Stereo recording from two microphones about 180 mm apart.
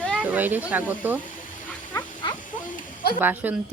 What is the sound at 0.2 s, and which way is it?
A woman's voice, 10° right (ahead or behind).